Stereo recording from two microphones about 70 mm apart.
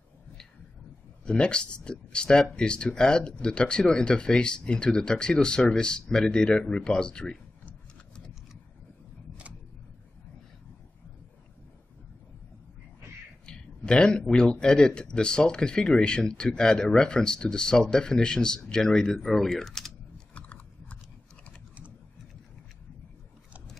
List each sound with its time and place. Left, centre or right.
1.2 s speech: centre
13.5 s speech: centre
20.3 s biting: left